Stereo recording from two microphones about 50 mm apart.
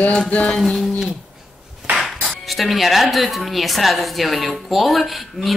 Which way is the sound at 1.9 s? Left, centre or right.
Centre.